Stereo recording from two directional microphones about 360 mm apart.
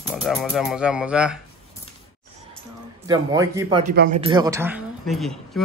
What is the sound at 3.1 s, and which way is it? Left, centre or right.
Speech, centre.